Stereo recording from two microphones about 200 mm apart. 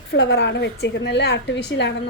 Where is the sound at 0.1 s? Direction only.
60° left (ahead or behind).